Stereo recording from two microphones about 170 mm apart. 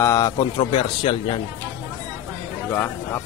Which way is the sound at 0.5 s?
30° left (ahead or behind).